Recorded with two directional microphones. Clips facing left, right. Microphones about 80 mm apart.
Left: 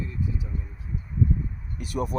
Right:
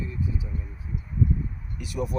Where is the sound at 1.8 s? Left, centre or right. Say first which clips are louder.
Left 2 dB; left.